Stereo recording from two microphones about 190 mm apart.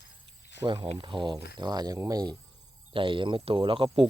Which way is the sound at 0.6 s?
25° right (ahead or behind).